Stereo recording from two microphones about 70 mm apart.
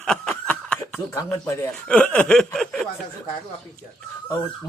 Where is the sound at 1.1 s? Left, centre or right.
Left.